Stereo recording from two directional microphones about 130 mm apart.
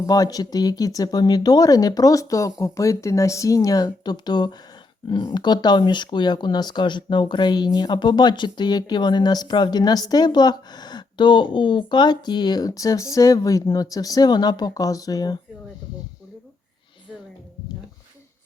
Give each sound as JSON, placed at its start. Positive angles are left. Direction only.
{"t": 0.0, "sound": "speech", "side_deg": 30}